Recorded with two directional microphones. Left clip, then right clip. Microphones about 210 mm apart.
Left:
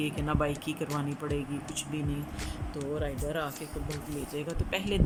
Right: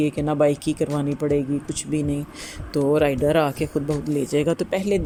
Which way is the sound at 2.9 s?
40° right (ahead or behind).